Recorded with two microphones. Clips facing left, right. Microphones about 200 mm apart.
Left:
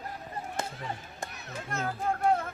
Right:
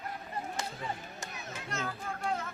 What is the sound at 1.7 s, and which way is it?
Speech, 55° left (ahead or behind).